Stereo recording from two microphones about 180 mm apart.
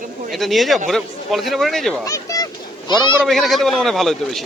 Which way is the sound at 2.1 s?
20° left (ahead or behind).